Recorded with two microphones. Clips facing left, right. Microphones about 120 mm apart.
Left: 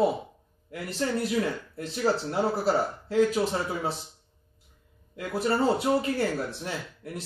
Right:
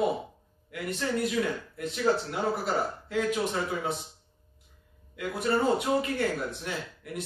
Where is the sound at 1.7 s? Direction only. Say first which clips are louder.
Even; 30° left (ahead or behind).